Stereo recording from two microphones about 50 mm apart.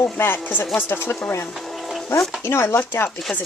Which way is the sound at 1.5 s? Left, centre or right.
Centre.